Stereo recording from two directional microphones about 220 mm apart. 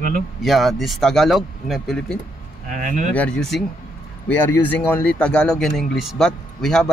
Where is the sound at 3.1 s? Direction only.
5° left (ahead or behind).